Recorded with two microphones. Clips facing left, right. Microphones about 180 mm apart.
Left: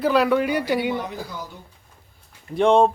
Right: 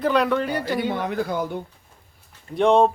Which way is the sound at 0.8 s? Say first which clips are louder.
Right 1 dB; 60° right (ahead or behind).